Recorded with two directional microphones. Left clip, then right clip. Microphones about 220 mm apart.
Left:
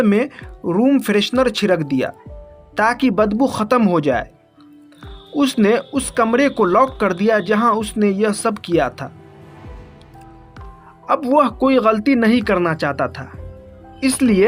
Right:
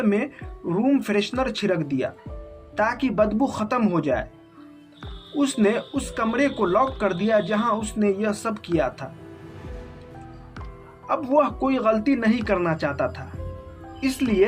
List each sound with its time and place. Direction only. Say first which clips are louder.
0.0 s speech: left 7 dB; 50° left (ahead or behind)
5.4 s speech: left 6 dB; 45° left (ahead or behind)
11.0 s speech: left 6 dB; 45° left (ahead or behind)